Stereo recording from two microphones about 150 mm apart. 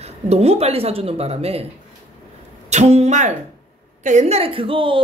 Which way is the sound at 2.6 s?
45° right (ahead or behind).